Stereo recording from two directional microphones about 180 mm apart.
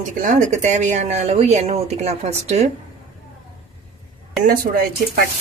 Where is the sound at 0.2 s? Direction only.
45° right (ahead or behind).